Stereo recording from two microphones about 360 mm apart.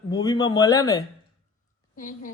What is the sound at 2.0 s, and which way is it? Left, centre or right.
Speech, left.